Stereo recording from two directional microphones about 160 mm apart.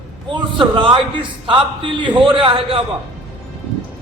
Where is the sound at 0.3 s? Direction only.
30° right (ahead or behind).